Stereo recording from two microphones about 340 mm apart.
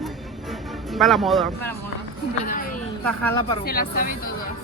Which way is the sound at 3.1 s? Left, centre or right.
Centre.